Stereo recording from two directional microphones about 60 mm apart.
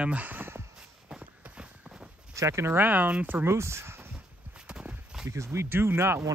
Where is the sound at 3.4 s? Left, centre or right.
Right.